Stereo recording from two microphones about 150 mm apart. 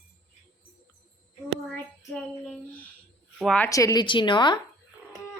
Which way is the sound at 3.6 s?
20° left (ahead or behind).